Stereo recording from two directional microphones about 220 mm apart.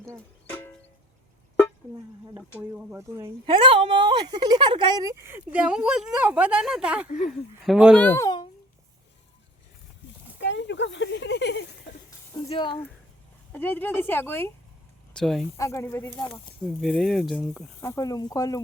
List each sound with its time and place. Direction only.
0.5 s music: 5° left (ahead or behind)
2.6 s a woman's voice: 10° right (ahead or behind)
8.0 s a child's voice: 10° left (ahead or behind)
10.3 s a sound: 55° left (ahead or behind)
12.5 s speech: 20° left (ahead or behind)
13.5 s speech: 10° left (ahead or behind)
15.5 s speech: 15° left (ahead or behind)
17.7 s speech: 15° left (ahead or behind)